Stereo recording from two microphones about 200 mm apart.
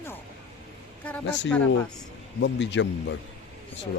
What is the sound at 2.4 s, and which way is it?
Speech, 65° left (ahead or behind).